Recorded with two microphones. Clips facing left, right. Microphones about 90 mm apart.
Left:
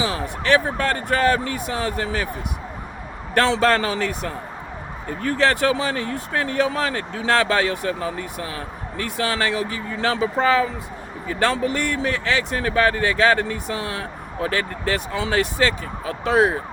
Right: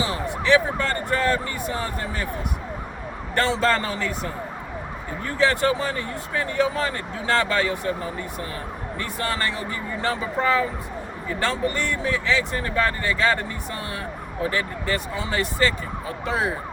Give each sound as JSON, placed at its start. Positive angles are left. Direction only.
{"t": 0.0, "sound": "speech", "side_deg": 80}
{"t": 3.3, "sound": "speech", "side_deg": 75}
{"t": 11.3, "sound": "speech", "side_deg": 70}